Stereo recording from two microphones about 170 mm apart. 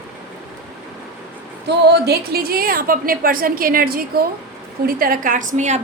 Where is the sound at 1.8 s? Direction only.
75° right (ahead or behind).